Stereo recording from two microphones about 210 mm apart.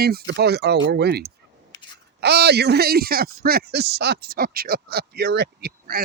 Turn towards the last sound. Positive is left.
turn(degrees=-50)  # may be behind; listen again after turning